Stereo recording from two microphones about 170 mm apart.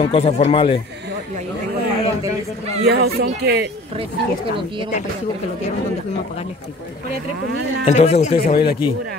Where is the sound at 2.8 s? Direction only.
70° right (ahead or behind).